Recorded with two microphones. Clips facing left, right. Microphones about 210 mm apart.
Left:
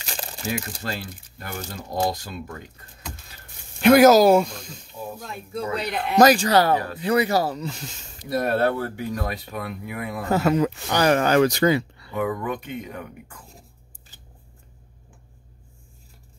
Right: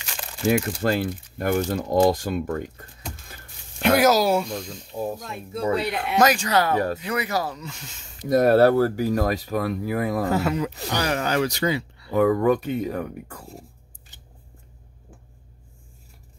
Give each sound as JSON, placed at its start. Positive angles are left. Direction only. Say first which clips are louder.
{"t": 0.0, "sound": "a sound", "louder": "left 3 dB", "side_deg": 35}
{"t": 0.5, "sound": "speech", "louder": "right 9 dB", "side_deg": -55}
{"t": 4.0, "sound": "speech", "louder": "left 6 dB", "side_deg": 45}
{"t": 4.9, "sound": "speech", "louder": "right 7 dB", "side_deg": -40}
{"t": 5.2, "sound": "speech", "louder": "right 3 dB", "side_deg": 0}
{"t": 6.1, "sound": "speech", "louder": "left 4 dB", "side_deg": 35}
{"t": 8.3, "sound": "speech", "louder": "right 6 dB", "side_deg": -40}
{"t": 10.4, "sound": "speech", "louder": "left 4 dB", "side_deg": 45}
{"t": 11.1, "sound": "speech", "louder": "left 7 dB", "side_deg": 55}
{"t": 12.1, "sound": "speech", "louder": "right 8 dB", "side_deg": -40}